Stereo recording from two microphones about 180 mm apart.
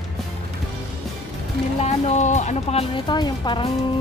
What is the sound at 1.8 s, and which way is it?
Speech, 40° left (ahead or behind).